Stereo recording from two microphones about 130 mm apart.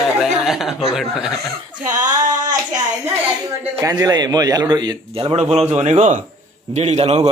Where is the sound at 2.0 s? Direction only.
30° right (ahead or behind).